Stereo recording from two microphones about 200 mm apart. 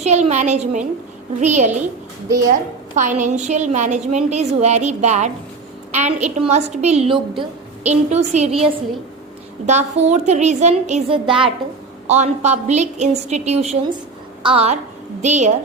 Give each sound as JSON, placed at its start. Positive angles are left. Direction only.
{"t": 0.0, "sound": "a woman's voice", "side_deg": -35}